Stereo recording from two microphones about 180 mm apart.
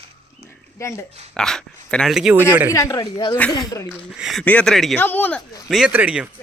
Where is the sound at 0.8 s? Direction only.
15° left (ahead or behind).